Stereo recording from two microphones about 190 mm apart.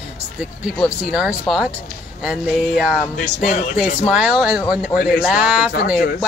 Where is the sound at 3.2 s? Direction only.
45° left (ahead or behind).